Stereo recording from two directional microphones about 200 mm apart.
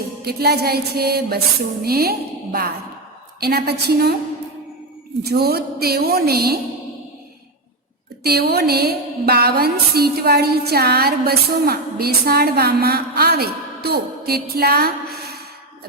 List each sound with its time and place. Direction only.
0.2 s music: 50° right (ahead or behind)
5.2 s music: 50° right (ahead or behind)
8.2 s music: 50° right (ahead or behind)